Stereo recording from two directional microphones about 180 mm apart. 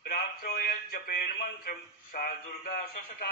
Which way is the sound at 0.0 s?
55° left (ahead or behind).